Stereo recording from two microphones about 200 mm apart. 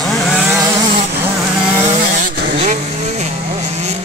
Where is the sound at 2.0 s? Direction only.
40° right (ahead or behind).